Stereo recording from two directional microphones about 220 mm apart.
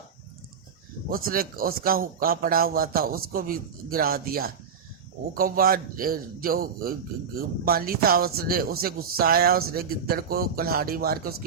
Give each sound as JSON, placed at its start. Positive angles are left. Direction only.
{"t": 1.1, "sound": "a man's voice", "side_deg": -40}